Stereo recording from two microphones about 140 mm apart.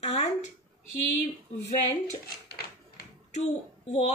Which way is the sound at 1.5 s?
50° left (ahead or behind).